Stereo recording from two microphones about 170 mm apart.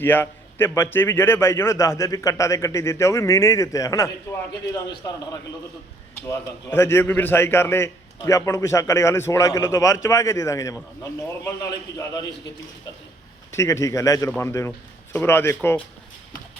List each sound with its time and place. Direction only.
0.0 s a man's voice: 10° left (ahead or behind)
6.1 s a man's voice: 15° left (ahead or behind)
13.5 s a man's voice: 15° left (ahead or behind)